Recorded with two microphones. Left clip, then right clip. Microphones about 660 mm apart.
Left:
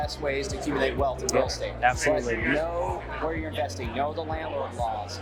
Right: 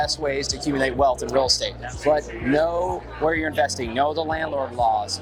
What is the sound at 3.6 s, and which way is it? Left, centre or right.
Speech, right.